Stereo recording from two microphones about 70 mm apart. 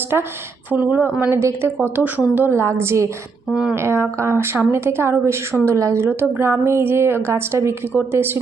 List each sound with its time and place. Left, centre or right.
0.7 s speech: right
1.3 s speech: right
3.5 s speech: centre
3.8 s speech: right